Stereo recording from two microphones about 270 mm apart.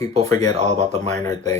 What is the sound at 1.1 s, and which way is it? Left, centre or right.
Speech, centre.